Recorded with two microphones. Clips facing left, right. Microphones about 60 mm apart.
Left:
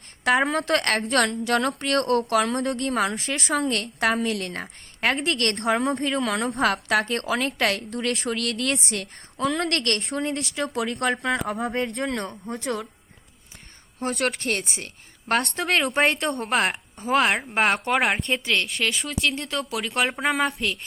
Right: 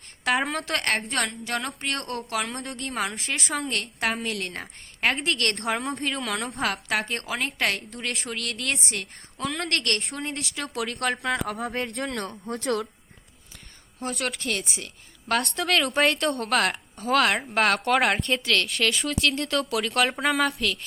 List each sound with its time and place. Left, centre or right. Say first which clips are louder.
0.3 s a woman's voice: left 4 dB; left
3.2 s a woman's voice: left 4 dB; left
12.1 s speech: left 2 dB; left
12.5 s a woman's voice: right 2 dB; left
14.0 s a woman's voice: left 4 dB; left
15.5 s speech: left 1 dB; left
16.5 s speech: left 1 dB; centre
18.7 s speech: right 1 dB; centre
20.4 s a woman's voice: even; left